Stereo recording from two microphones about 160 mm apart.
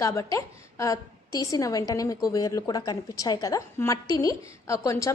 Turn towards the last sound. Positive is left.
turn(degrees=20)  # may be behind; listen again after turning